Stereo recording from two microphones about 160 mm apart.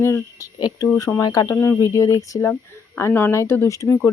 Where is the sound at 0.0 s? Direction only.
15° left (ahead or behind).